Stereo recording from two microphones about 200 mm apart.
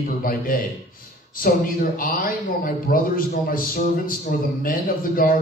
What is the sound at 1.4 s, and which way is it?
Speech, 45° left (ahead or behind).